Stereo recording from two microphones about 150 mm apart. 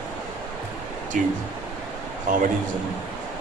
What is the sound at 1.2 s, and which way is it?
A man's voice, 65° right (ahead or behind).